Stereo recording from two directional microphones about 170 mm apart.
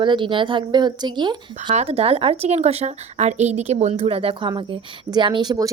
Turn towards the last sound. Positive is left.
turn(degrees=-25)  # may be behind; listen again after turning